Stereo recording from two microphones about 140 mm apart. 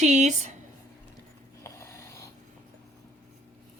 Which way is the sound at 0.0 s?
60° right (ahead or behind).